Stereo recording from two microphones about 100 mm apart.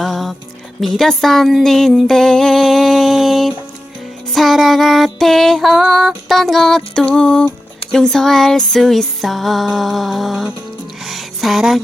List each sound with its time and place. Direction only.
0.0 s music: centre (ahead or behind)
0.8 s a sound: centre (ahead or behind)
4.3 s music: centre (ahead or behind)